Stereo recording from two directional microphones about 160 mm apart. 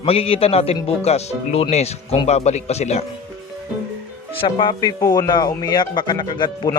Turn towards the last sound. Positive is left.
turn(degrees=25)  # may be behind; listen again after turning